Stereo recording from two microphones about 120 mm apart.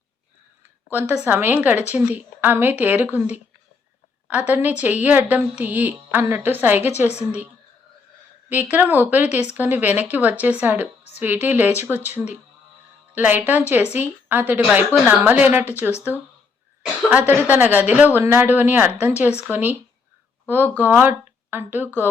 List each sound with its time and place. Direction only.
0.9 s a woman's voice: 15° right (ahead or behind)
8.4 s a woman's voice: 15° right (ahead or behind)
17.1 s a woman's voice: 15° right (ahead or behind)